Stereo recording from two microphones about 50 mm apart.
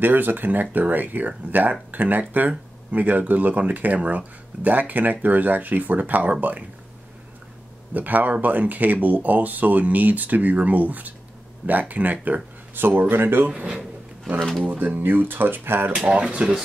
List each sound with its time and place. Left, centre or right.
0.0 s speech: right
7.9 s speech: right
14.6 s speech: right
15.9 s speech: centre